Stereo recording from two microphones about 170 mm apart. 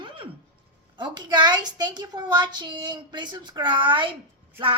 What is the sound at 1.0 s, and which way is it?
A woman's voice, 25° right (ahead or behind).